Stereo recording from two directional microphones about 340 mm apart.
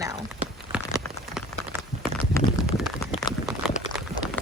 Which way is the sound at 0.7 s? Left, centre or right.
Centre.